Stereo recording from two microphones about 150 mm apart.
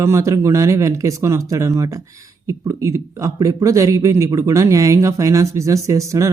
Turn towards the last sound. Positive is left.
turn(degrees=-20)  # may be behind; listen again after turning